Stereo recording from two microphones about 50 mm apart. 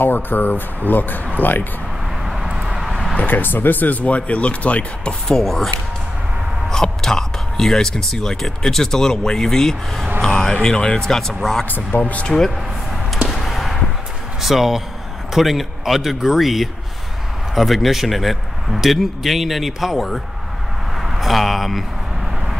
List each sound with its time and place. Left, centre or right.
0.0 s speech: left
2.2 s a sound: centre
3.2 s speech: left
5.3 s a man's voice: centre
6.7 s speech: centre
11.9 s speech: left
12.3 s speech: centre
13.3 s a sound: centre
14.4 s a man's voice: centre